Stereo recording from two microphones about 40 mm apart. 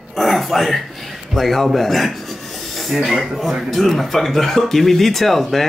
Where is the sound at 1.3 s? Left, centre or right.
Centre.